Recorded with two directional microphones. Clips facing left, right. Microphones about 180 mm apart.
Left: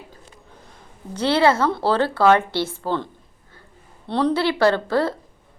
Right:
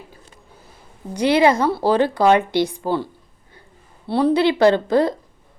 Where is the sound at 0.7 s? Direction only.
15° right (ahead or behind).